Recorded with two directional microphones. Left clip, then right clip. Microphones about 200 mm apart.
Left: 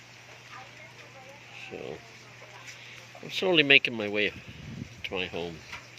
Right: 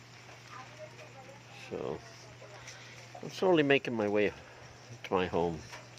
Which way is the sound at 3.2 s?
Centre (ahead or behind).